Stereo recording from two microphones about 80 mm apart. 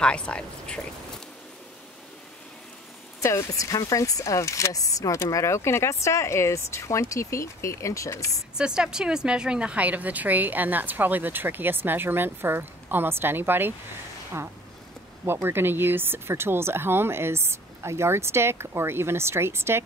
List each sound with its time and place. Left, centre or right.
0.0 s speech: centre
3.2 s speech: left
8.5 s speech: centre; by 13.7 s right
15.4 s speech: right